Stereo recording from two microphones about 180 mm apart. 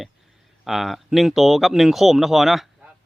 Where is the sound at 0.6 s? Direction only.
Centre (ahead or behind).